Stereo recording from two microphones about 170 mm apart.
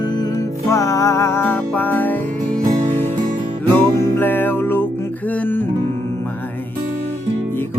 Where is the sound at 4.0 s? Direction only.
15° left (ahead or behind).